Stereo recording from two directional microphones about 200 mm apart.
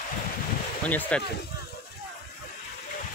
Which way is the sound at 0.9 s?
10° left (ahead or behind).